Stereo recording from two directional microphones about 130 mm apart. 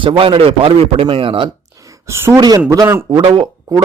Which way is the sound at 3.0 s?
40° right (ahead or behind).